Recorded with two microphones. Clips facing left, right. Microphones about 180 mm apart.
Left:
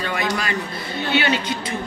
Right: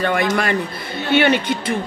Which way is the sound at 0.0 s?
55° right (ahead or behind).